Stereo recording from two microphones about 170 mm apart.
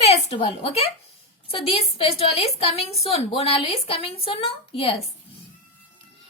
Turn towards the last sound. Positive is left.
turn(degrees=35)  # may be behind; listen again after turning